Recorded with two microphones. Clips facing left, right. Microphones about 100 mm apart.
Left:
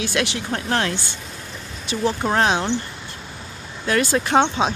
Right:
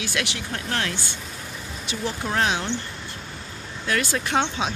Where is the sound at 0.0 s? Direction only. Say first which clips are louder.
Left 5 dB; 35° left (ahead or behind).